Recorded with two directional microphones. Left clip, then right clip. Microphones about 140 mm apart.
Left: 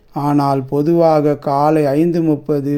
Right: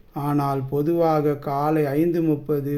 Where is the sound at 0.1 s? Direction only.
50° left (ahead or behind).